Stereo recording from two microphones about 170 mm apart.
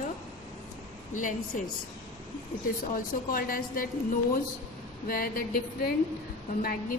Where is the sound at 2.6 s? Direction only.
55° left (ahead or behind).